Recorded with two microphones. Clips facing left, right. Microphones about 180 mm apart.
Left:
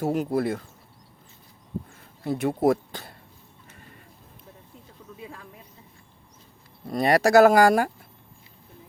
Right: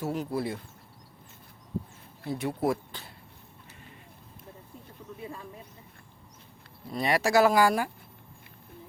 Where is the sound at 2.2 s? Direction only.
60° left (ahead or behind).